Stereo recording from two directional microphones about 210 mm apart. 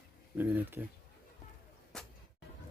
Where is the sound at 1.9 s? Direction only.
Centre (ahead or behind).